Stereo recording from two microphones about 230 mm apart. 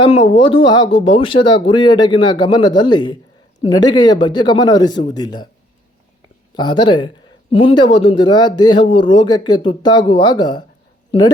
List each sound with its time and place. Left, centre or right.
0.3 s speech: left
6.6 s speech: centre